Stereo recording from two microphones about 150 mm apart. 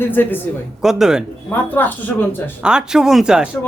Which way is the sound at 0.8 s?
5° right (ahead or behind).